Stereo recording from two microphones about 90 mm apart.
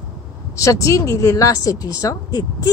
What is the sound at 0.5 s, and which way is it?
A woman's voice, 35° left (ahead or behind).